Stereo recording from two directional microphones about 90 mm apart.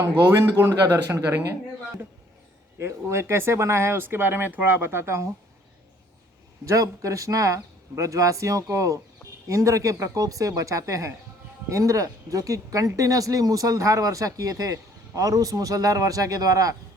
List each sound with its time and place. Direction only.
0.9 s speech: 30° right (ahead or behind)
2.7 s speech: 30° right (ahead or behind)
6.7 s speech: 35° right (ahead or behind)